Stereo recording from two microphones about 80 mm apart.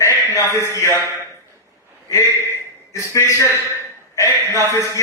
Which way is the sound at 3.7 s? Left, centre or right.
Left.